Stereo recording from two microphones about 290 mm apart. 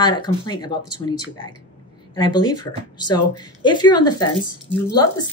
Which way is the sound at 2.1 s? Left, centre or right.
Centre.